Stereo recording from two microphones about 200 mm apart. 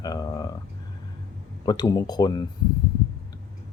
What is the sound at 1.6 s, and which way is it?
Speech, 20° left (ahead or behind).